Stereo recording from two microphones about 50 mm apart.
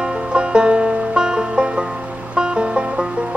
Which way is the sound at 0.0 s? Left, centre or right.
Centre.